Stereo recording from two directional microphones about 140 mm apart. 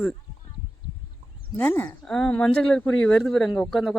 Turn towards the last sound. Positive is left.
turn(degrees=0)  # may be behind; listen again after turning